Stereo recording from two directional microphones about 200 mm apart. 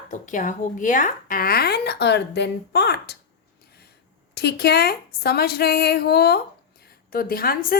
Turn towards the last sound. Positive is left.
turn(degrees=45)  # may be behind; listen again after turning